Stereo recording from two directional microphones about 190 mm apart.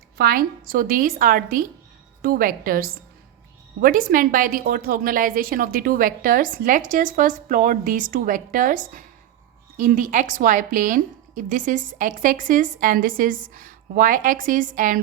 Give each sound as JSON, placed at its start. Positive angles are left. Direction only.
{"t": 0.2, "sound": "a woman's voice", "side_deg": -50}